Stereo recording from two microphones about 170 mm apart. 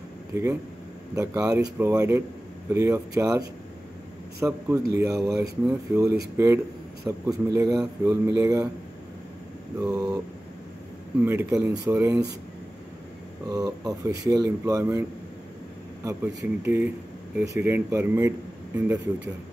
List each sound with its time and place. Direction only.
0.3 s speech: 15° right (ahead or behind)
4.4 s speech: 10° right (ahead or behind)
9.8 s speech: 20° right (ahead or behind)
13.5 s speech: 20° right (ahead or behind)